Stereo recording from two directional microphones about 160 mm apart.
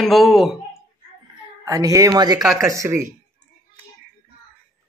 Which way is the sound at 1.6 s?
20° right (ahead or behind).